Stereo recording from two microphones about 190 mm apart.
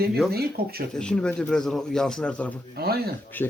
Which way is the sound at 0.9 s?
5° left (ahead or behind).